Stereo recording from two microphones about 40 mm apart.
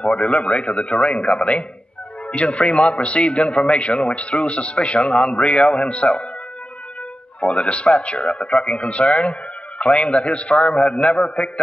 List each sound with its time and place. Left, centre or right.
0.0 s a man's voice: left
7.3 s a man's voice: left